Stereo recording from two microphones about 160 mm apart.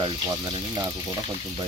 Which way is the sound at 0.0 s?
30° right (ahead or behind).